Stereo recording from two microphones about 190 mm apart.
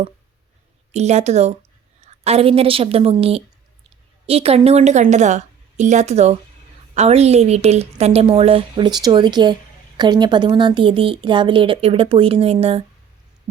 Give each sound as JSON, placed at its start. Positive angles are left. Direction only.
{"t": 0.9, "sound": "a woman's voice", "side_deg": -35}